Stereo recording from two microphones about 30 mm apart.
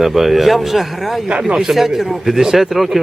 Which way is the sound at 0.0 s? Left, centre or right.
Centre.